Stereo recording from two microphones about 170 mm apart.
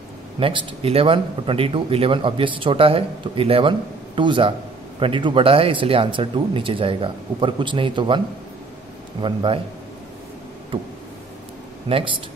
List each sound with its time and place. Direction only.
0.4 s speech: 30° right (ahead or behind)
9.2 s a man's voice: 30° right (ahead or behind)
10.7 s speech: 35° right (ahead or behind)
11.9 s a man's voice: 30° right (ahead or behind)